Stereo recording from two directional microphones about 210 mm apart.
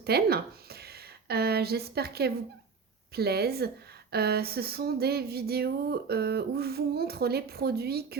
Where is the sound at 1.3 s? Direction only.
50° right (ahead or behind).